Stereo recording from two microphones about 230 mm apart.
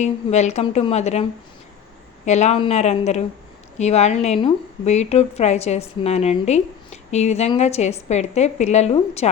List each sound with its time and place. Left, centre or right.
0.0 s a woman's voice: left